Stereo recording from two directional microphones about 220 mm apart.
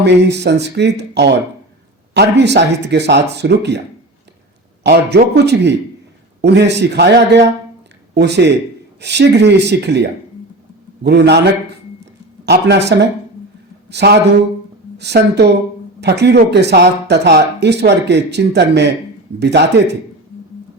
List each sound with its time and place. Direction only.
0.0 s speech: 50° right (ahead or behind)
4.8 s speech: 50° right (ahead or behind)
12.5 s speech: 50° right (ahead or behind)